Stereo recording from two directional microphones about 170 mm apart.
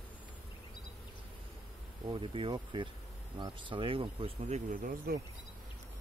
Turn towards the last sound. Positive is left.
turn(degrees=-60)  # may be behind; listen again after turning